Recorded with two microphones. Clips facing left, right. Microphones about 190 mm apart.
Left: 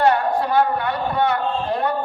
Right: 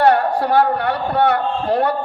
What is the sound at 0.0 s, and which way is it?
A man's voice, 65° right (ahead or behind).